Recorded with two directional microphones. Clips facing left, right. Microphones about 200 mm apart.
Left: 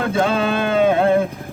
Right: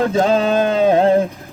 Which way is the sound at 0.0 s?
40° right (ahead or behind).